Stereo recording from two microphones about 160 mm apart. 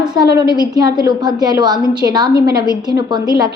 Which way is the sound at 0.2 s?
25° right (ahead or behind).